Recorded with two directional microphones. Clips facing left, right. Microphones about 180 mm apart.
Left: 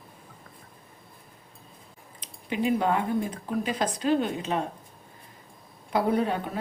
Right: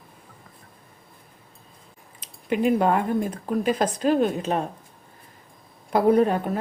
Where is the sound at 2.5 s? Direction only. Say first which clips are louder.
Right 4 dB; 50° right (ahead or behind).